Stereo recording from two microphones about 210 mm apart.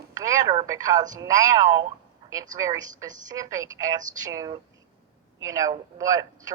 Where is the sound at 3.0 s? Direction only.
15° right (ahead or behind).